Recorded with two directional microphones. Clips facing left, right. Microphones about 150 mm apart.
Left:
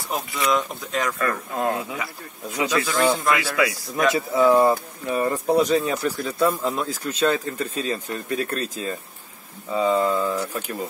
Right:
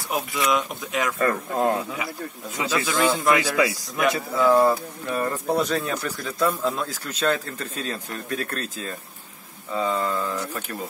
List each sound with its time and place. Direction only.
0.1 s speech: centre (ahead or behind)
1.1 s speech: 25° right (ahead or behind)
2.7 s speech: centre (ahead or behind)
3.3 s speech: 20° right (ahead or behind)
3.9 s speech: 25° left (ahead or behind)
4.5 s speech: 10° left (ahead or behind)